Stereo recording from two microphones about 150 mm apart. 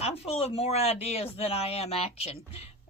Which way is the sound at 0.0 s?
40° left (ahead or behind).